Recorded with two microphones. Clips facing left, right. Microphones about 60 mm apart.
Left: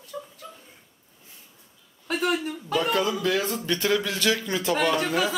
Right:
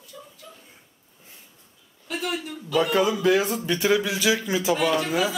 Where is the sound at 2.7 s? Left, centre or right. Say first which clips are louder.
Right 3 dB; centre.